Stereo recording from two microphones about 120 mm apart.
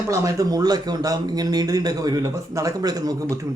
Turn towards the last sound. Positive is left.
turn(degrees=-30)  # may be behind; listen again after turning